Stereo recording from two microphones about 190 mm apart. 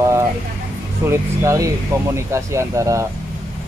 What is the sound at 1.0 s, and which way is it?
Speech, 15° right (ahead or behind).